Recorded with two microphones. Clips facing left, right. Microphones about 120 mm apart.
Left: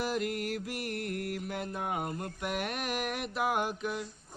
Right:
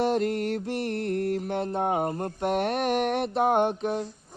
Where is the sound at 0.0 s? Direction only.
35° right (ahead or behind).